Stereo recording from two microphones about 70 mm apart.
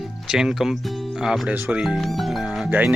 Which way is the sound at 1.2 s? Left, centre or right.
Centre.